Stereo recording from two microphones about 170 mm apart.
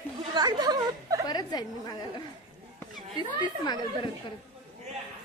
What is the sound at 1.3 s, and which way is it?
Speech, 25° left (ahead or behind).